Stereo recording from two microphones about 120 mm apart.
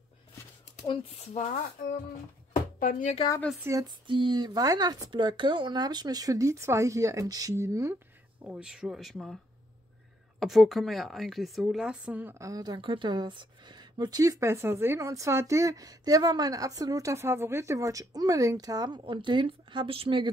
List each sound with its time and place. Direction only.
1.1 s speech: 70° left (ahead or behind)
3.8 s a woman's voice: 40° right (ahead or behind); by 8.0 s 20° right (ahead or behind)
8.5 s a woman's voice: 5° right (ahead or behind)
10.4 s a woman's voice: centre (ahead or behind)
12.4 s a woman's voice: 30° right (ahead or behind); by 20.2 s 45° right (ahead or behind)